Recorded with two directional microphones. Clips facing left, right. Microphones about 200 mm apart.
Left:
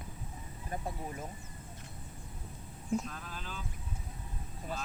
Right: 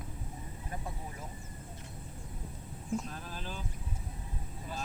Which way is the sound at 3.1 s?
40° right (ahead or behind).